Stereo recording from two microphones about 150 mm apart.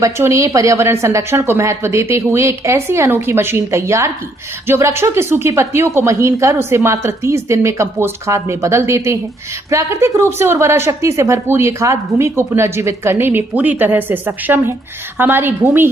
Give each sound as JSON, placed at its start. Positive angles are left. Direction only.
{"t": 0.0, "sound": "a woman's voice", "side_deg": -20}